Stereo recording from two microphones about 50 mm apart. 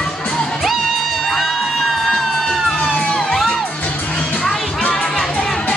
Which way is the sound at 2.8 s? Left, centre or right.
Centre.